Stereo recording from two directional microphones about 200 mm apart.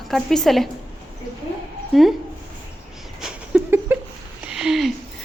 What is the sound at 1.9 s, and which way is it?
Speech, centre (ahead or behind).